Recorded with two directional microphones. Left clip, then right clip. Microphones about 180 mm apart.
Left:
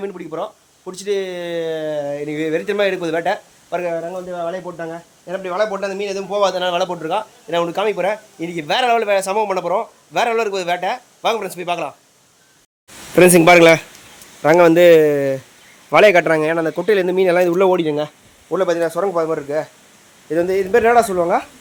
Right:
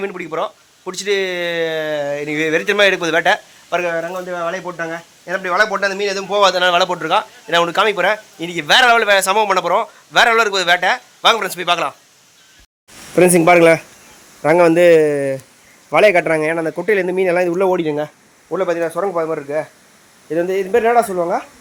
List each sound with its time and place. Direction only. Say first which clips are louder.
0.0 s speech: right 4 dB; 30° right (ahead or behind); by 4.0 s 5° right (ahead or behind)
4.1 s speech: right 2 dB; 20° right (ahead or behind)
7.5 s speech: right 4 dB; 5° right (ahead or behind)
13.1 s a man's voice: left 1 dB; 15° left (ahead or behind)